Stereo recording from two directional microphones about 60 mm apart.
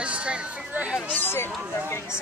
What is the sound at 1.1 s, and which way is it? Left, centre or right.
Speech, left.